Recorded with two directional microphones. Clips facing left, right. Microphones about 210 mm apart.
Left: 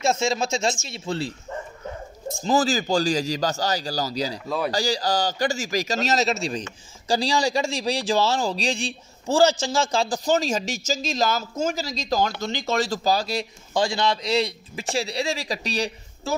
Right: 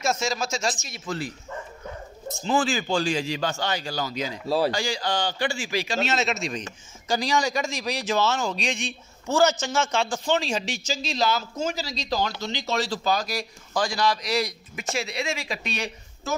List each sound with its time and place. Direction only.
0.0 s speech: 25° left (ahead or behind)
2.4 s speech: 40° left (ahead or behind)